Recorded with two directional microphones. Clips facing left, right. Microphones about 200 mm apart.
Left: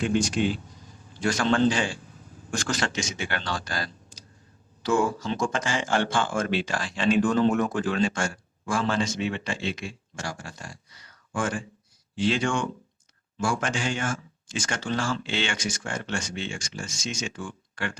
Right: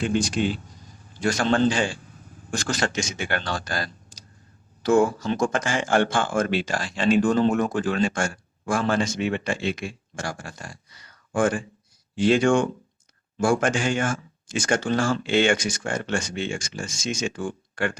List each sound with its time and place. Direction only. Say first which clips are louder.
1.2 s a man's voice: right 1 dB; 40° right (ahead or behind)